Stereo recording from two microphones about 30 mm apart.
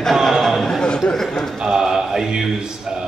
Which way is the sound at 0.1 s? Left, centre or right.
Centre.